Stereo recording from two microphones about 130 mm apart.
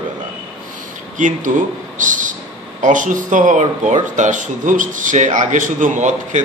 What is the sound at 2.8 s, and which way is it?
Speech, 85° right.